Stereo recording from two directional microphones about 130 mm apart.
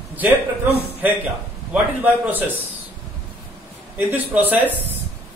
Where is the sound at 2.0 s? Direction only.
15° right (ahead or behind).